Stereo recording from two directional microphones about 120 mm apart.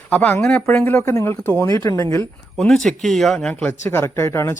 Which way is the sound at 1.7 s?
30° left (ahead or behind).